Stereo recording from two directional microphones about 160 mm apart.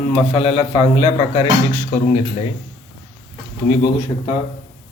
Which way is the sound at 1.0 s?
30° left (ahead or behind).